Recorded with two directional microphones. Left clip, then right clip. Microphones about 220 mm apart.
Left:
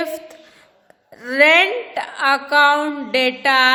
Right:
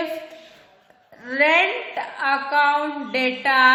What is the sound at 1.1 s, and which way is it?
A woman's voice, 45° left (ahead or behind).